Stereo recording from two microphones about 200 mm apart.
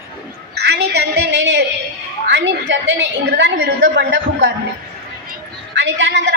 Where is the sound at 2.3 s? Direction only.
60° right (ahead or behind).